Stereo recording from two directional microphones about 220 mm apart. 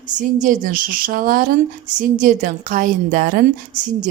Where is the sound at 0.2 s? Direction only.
35° right (ahead or behind).